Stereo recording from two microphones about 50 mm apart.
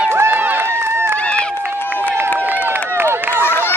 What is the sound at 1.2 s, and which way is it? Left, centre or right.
Run, left.